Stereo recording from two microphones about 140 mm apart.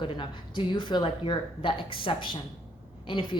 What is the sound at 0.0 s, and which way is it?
A woman's voice, 35° left (ahead or behind).